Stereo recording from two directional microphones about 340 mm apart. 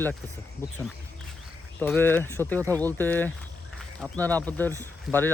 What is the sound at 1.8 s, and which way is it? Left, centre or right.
Speech, centre.